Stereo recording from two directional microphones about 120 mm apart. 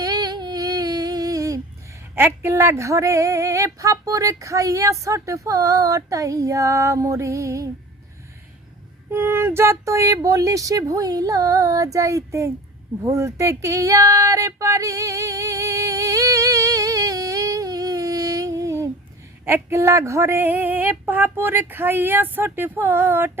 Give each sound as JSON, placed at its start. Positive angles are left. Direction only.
{"t": 0.0, "sound": "a sound", "side_deg": -35}
{"t": 2.1, "sound": "female singing", "side_deg": -20}
{"t": 9.1, "sound": "female singing", "side_deg": -20}
{"t": 13.1, "sound": "a sound", "side_deg": -25}
{"t": 19.5, "sound": "female singing", "side_deg": -20}
{"t": 21.0, "sound": "speech", "side_deg": -15}